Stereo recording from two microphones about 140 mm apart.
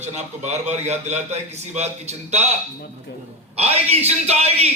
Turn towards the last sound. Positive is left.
turn(degrees=-50)  # may be behind; listen again after turning